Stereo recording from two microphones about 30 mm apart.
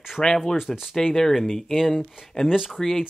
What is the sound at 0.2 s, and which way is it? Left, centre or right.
Speech, centre.